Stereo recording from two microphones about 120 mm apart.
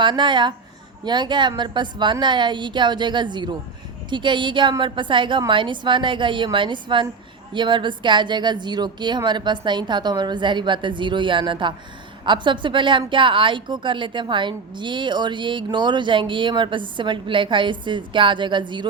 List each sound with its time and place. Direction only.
0.0 s a woman's voice: 40° right (ahead or behind)